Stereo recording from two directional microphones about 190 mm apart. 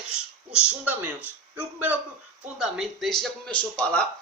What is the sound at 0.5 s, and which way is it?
A man's voice, 5° right (ahead or behind).